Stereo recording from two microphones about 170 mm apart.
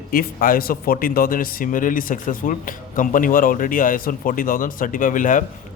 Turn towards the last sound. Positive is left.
turn(degrees=50)  # may be behind; listen again after turning